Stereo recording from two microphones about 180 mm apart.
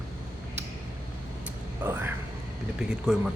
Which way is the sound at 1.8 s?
10° right (ahead or behind).